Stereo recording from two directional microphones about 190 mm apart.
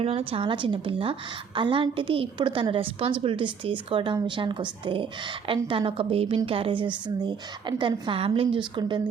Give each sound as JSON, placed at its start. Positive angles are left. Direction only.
{"t": 0.0, "sound": "a woman's voice", "side_deg": -30}